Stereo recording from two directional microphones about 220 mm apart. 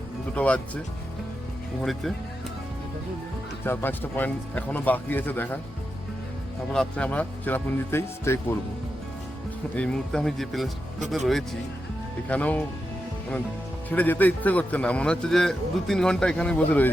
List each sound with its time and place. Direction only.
0.3 s a man's voice: 5° left (ahead or behind)
1.8 s a man's voice: centre (ahead or behind)
3.6 s speech: 10° left (ahead or behind)
6.7 s speech: 5° left (ahead or behind)
9.7 s a man's voice: 5° left (ahead or behind)
12.3 s speech: 5° left (ahead or behind)
13.9 s a man's voice: 10° left (ahead or behind)